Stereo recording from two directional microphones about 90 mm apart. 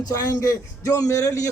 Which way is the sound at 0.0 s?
40° left (ahead or behind).